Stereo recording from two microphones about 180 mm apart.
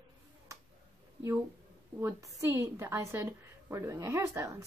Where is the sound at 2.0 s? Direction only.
15° right (ahead or behind).